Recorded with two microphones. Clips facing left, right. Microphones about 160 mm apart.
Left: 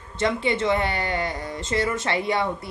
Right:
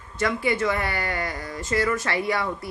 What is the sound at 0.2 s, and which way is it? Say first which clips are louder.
Speech: left 1 dB; 25° left (ahead or behind).